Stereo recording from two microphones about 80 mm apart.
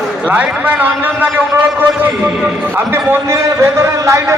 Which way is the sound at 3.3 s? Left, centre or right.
Right.